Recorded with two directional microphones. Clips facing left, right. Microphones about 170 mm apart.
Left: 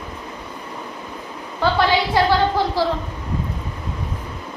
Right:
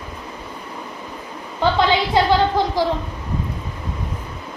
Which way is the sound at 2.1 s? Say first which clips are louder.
Right 2 dB; 15° right (ahead or behind).